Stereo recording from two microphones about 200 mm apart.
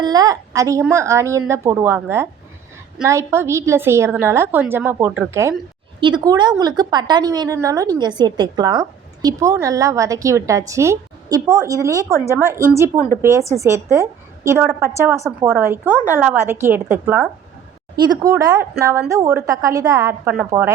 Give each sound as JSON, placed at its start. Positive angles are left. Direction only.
{"t": 0.0, "sound": "a woman's voice", "side_deg": -20}